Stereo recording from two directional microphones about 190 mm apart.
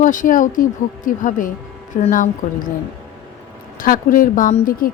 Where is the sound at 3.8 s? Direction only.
45° left (ahead or behind).